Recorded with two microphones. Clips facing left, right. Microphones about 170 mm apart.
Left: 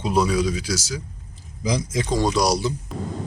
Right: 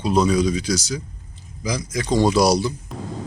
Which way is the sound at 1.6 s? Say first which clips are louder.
Left 2 dB; 25° left (ahead or behind).